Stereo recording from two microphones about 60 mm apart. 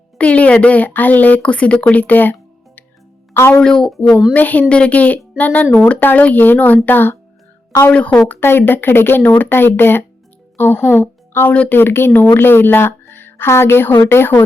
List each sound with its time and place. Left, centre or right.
0.2 s speech: left
3.6 s speech: centre
4.4 s speech: left
7.9 s speech: left
8.4 s a woman's voice: left
11.5 s speech: left
11.8 s speech: left